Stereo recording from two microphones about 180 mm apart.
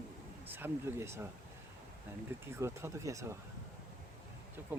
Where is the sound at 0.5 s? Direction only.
15° right (ahead or behind).